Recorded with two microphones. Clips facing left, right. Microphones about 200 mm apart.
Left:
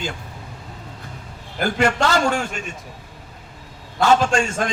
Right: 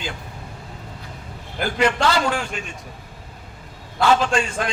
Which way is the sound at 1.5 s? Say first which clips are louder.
Left 1 dB; 45° left (ahead or behind).